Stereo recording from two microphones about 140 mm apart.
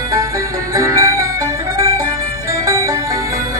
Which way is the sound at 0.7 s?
25° right (ahead or behind).